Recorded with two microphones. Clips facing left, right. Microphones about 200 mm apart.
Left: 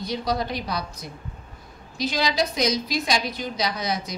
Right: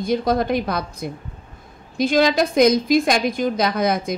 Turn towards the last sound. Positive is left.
turn(degrees=-55)  # may be behind; listen again after turning